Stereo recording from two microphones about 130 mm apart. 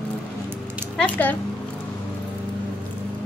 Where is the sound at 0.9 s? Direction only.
10° left (ahead or behind).